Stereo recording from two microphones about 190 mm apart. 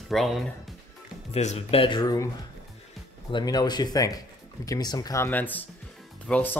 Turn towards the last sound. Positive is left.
turn(degrees=10)  # may be behind; listen again after turning